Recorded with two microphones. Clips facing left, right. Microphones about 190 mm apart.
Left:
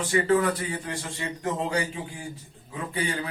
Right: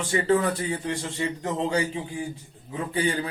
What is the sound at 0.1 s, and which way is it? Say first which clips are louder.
Speech: even; 30° right (ahead or behind).